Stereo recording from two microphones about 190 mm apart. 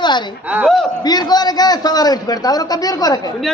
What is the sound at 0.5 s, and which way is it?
Speech, 5° right (ahead or behind).